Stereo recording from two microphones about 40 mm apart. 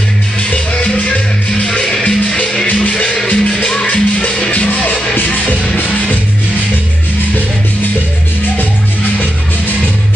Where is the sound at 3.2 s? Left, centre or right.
Left.